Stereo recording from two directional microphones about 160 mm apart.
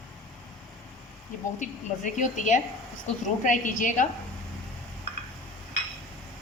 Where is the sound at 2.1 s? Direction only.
50° left (ahead or behind).